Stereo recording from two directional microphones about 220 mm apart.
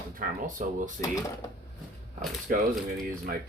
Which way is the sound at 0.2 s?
35° right (ahead or behind).